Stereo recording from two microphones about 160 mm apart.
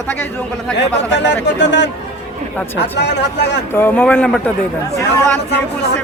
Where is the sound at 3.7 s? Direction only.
15° left (ahead or behind).